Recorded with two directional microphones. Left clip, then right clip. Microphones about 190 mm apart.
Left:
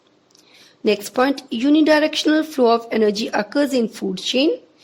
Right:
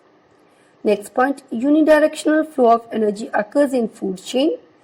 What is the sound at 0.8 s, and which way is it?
A woman's voice, 35° left (ahead or behind).